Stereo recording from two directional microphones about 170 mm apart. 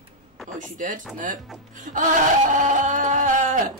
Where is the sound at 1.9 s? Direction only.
45° right (ahead or behind).